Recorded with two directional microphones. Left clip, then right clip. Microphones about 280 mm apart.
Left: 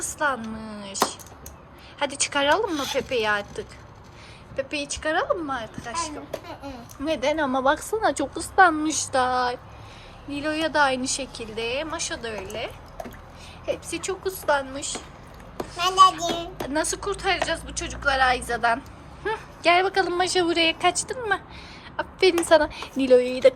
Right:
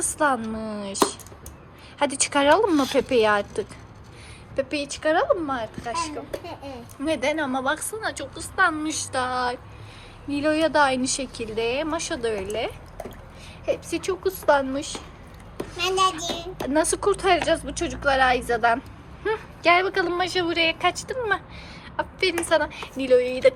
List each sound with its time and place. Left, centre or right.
0.0 s a woman's voice: centre
2.0 s a woman's voice: centre